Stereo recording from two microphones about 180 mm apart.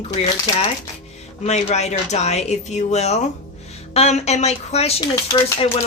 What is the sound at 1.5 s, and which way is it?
Speech, 40° left (ahead or behind).